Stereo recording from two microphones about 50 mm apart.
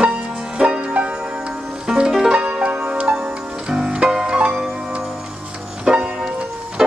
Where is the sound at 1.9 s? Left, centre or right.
Centre.